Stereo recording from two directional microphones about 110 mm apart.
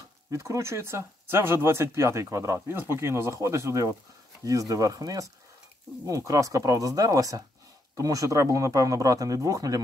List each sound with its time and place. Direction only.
0.3 s speech: 25° right (ahead or behind)